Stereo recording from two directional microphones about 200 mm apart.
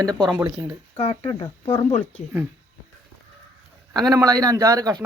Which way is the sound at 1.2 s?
15° left (ahead or behind).